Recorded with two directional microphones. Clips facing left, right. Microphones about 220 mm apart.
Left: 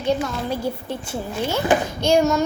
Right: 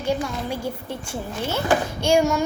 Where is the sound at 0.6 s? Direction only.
10° left (ahead or behind).